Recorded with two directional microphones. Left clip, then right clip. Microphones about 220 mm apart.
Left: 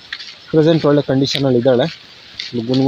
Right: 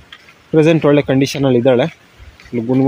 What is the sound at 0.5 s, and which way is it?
Speech, 15° right (ahead or behind).